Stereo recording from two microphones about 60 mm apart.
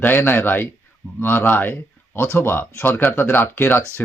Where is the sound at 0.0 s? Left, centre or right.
Left.